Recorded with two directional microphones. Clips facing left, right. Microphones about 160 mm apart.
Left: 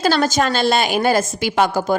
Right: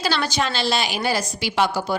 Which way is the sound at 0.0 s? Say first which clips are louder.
Left 6 dB; 45° left (ahead or behind).